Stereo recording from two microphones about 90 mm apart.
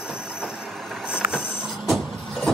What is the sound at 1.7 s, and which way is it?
Vehicle, centre (ahead or behind).